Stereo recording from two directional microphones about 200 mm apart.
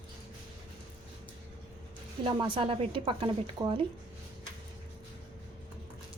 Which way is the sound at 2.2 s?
25° right (ahead or behind).